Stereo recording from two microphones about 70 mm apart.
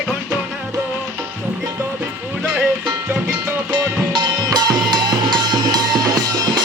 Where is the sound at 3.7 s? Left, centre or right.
Right.